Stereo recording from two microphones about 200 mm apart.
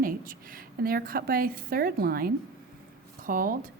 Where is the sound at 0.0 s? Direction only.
45° right (ahead or behind).